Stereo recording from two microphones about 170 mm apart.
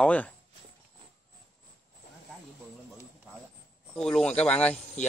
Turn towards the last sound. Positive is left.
turn(degrees=5)  # may be behind; listen again after turning